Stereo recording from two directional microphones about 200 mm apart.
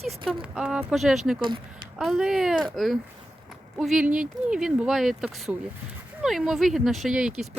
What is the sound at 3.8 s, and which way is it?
Speech, centre (ahead or behind).